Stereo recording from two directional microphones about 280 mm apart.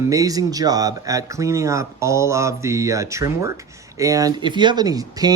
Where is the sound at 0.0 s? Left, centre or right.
Centre.